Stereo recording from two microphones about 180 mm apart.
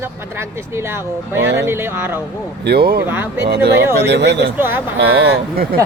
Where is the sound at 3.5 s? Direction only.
65° right (ahead or behind).